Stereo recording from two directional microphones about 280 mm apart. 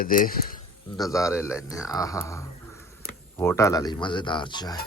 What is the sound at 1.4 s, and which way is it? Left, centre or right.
Speech, centre.